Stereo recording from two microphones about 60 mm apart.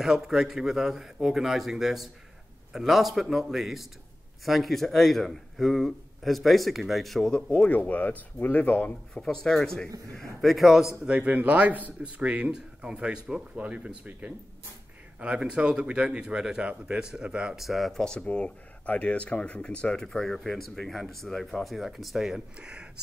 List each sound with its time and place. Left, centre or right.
0.0 s a man's voice: centre
7.5 s speech: centre
9.1 s a man's voice: centre
11.1 s speech: right
15.1 s speech: centre
17.6 s a man's voice: centre
18.0 s speech: centre
22.6 s speech: centre